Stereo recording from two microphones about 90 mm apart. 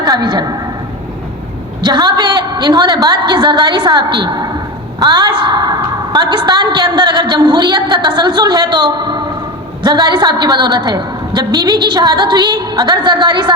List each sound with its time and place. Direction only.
0.0 s a woman's voice: 50° right (ahead or behind)
1.8 s a woman's voice: 55° right (ahead or behind)